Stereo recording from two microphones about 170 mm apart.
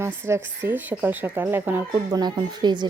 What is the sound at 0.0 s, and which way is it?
A woman's voice, 15° right (ahead or behind).